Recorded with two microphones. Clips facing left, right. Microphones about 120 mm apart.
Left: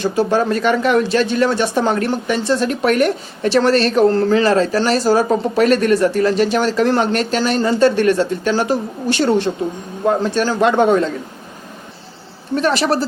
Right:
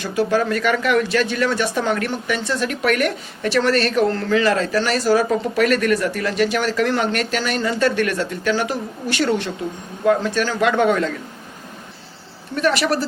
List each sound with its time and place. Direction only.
0.0 s speech: 30° left (ahead or behind)
12.5 s speech: 30° left (ahead or behind)